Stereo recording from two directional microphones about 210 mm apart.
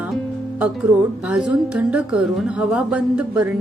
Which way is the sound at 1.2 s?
5° right (ahead or behind).